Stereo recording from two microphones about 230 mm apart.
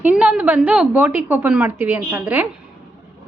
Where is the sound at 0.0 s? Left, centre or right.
Centre.